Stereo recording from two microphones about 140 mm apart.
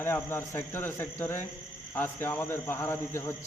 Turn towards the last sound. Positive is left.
turn(degrees=20)  # may be behind; listen again after turning